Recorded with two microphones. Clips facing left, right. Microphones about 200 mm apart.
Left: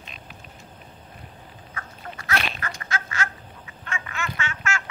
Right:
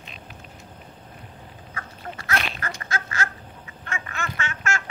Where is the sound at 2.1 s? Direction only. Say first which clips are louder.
Even; 35° right (ahead or behind).